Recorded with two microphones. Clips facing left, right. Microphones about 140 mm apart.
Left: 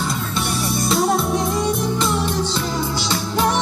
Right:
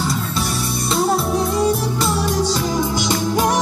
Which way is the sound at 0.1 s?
Centre (ahead or behind).